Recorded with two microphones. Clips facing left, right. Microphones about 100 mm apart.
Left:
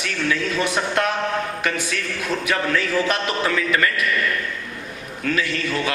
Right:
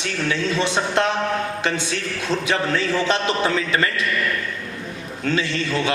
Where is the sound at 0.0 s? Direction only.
30° right (ahead or behind).